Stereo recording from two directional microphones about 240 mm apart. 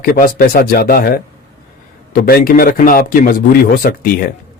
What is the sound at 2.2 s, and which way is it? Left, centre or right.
Speech, left.